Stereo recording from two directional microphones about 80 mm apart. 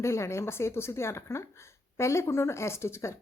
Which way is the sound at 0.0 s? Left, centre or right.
Left.